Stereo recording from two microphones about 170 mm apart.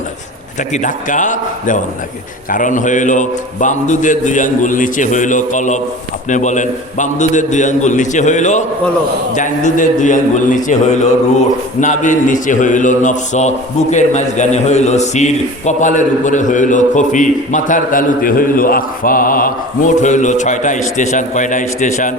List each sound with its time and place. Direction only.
0.7 s a man's voice: 50° left (ahead or behind)